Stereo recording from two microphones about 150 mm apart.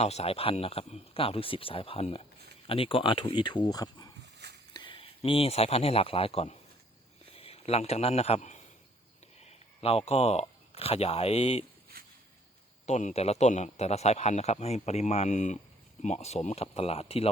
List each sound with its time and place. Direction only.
0.0 s a man's voice: 45° left (ahead or behind)
11.9 s a sound: 85° right
12.8 s a man's voice: 50° left (ahead or behind)